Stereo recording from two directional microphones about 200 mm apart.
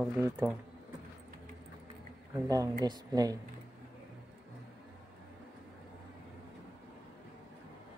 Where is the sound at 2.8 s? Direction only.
20° right (ahead or behind).